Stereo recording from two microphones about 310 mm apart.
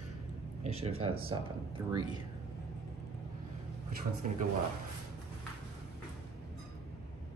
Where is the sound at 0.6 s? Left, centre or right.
Centre.